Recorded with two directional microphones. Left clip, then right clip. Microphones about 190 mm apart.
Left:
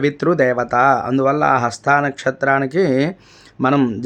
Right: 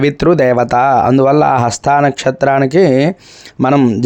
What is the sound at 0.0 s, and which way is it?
Speech, 40° right (ahead or behind).